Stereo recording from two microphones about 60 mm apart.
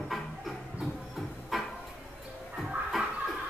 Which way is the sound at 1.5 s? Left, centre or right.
Centre.